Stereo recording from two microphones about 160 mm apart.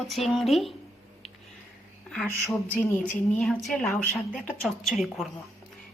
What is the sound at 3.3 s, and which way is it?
A woman's voice, 5° left (ahead or behind).